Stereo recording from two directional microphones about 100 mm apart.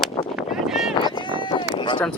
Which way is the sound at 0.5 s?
5° right (ahead or behind).